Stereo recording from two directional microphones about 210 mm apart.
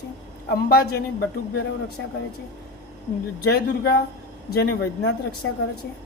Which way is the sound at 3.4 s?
50° left (ahead or behind).